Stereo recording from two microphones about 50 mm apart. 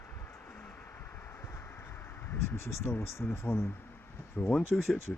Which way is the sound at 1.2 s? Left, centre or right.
Left.